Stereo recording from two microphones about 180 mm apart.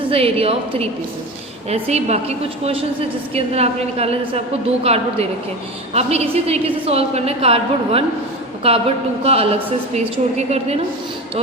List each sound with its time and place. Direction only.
0.1 s a woman's voice: 30° right (ahead or behind)